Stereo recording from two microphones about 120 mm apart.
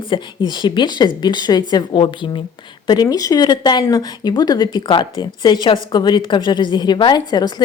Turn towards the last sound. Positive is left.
turn(degrees=35)  # may be behind; listen again after turning